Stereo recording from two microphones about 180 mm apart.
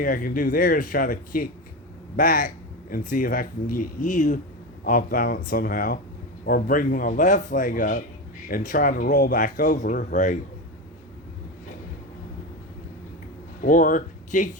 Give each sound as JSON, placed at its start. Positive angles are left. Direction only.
{"t": 0.0, "sound": "speech", "side_deg": 50}
{"t": 13.6, "sound": "speech", "side_deg": 50}